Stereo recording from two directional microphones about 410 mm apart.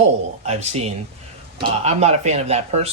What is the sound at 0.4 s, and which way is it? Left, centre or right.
Speech, centre.